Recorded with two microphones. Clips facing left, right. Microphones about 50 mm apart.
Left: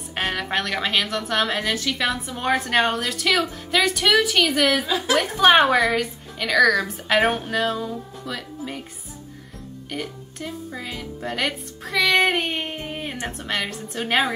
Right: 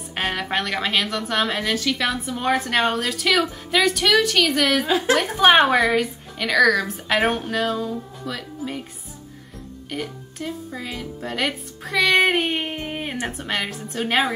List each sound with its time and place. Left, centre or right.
0.1 s a woman's voice: centre
4.8 s a woman's voice: right
5.2 s a woman's voice: centre
9.8 s a woman's voice: centre